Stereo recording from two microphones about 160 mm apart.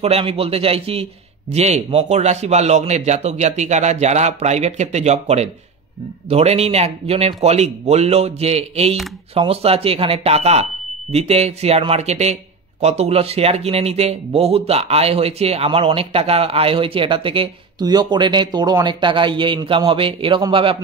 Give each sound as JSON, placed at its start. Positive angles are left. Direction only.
{"t": 0.0, "sound": "a man's voice", "side_deg": -35}